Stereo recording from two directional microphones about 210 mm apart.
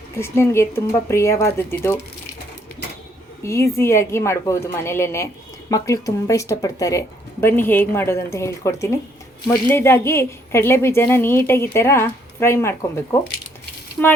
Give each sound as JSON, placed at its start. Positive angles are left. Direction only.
{"t": 0.2, "sound": "a woman's voice", "side_deg": 10}
{"t": 3.4, "sound": "a woman's voice", "side_deg": 15}